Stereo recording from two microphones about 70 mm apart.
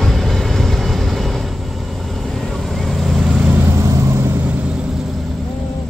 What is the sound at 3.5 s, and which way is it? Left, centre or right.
Vehicle, right.